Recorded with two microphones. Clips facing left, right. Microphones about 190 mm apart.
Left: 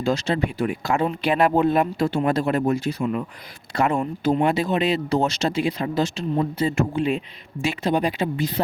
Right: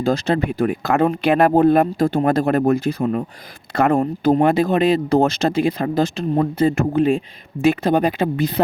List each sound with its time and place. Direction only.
0.0 s speech: 55° right (ahead or behind)
3.0 s speech: 40° right (ahead or behind); by 8.6 s 60° right (ahead or behind)